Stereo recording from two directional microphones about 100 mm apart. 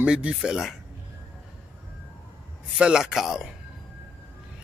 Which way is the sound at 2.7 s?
5° right (ahead or behind).